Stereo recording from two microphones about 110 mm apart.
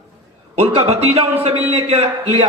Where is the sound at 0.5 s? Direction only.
65° right (ahead or behind).